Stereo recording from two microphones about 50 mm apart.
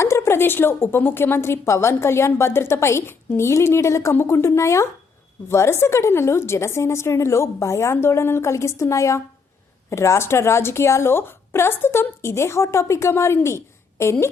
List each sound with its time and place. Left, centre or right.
0.0 s a sound: left
0.3 s a woman's voice: left
5.5 s a woman's voice: left
9.9 s a woman's voice: left
11.1 s a woman's voice: left